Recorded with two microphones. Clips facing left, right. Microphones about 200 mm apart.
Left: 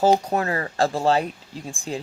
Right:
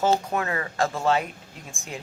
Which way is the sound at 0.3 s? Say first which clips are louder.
Left 3 dB; 35° left (ahead or behind).